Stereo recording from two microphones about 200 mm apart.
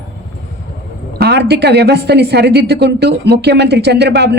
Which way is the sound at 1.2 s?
55° right (ahead or behind).